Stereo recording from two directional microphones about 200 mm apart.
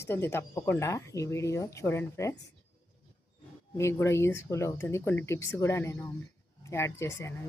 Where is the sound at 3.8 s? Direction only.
15° left (ahead or behind).